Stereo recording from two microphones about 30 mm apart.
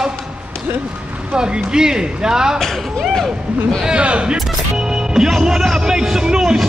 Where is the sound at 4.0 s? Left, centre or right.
Right.